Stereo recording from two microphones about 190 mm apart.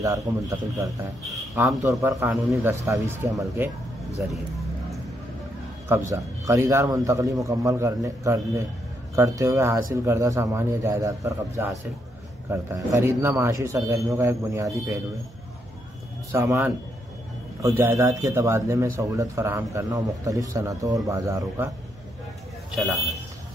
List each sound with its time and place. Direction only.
0.0 s a man's voice: 15° right (ahead or behind)
5.9 s a man's voice: 15° right (ahead or behind)
16.3 s a man's voice: 15° right (ahead or behind)